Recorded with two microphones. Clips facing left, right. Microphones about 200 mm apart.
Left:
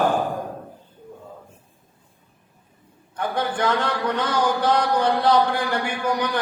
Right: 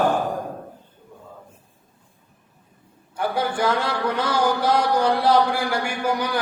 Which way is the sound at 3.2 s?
10° right (ahead or behind).